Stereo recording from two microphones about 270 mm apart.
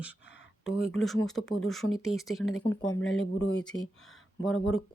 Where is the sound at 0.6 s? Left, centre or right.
Centre.